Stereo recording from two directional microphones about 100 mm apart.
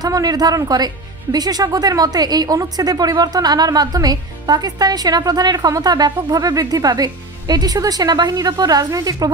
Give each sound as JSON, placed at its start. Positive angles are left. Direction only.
{"t": 0.0, "sound": "a woman's voice", "side_deg": -40}